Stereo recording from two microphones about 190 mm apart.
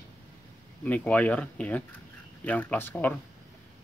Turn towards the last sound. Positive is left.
turn(degrees=10)  # may be behind; listen again after turning